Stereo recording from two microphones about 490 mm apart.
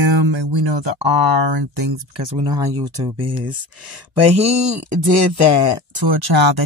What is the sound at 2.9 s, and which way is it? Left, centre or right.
Speech, right.